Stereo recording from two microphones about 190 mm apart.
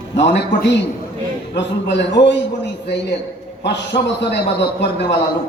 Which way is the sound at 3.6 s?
65° left (ahead or behind).